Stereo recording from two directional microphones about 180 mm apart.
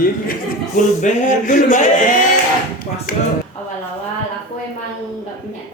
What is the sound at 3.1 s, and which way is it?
Speech, 50° left (ahead or behind).